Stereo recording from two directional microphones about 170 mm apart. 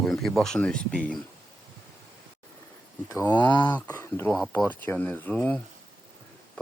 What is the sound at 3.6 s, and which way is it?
Speech, 15° left (ahead or behind).